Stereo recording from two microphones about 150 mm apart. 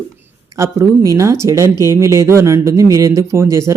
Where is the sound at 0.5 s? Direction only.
20° right (ahead or behind).